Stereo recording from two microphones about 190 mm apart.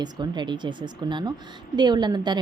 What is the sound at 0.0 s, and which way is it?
A woman's voice, 25° right (ahead or behind).